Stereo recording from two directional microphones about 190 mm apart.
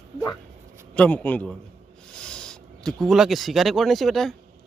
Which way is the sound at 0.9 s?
5° left (ahead or behind).